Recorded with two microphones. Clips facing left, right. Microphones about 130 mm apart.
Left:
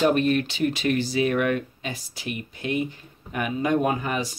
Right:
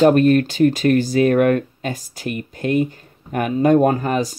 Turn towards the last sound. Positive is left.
turn(degrees=-40)  # may be behind; listen again after turning